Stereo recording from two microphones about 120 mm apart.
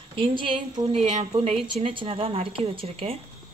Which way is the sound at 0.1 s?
45° right (ahead or behind).